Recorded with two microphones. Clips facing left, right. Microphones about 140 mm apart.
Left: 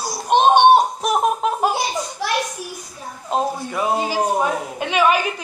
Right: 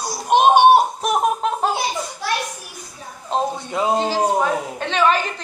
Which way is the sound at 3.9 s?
15° left (ahead or behind).